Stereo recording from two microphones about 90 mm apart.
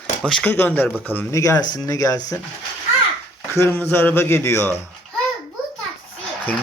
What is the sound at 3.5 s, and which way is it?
Speech, 30° left (ahead or behind).